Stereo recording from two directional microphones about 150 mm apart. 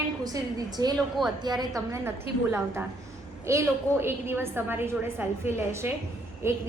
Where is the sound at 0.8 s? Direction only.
25° right (ahead or behind).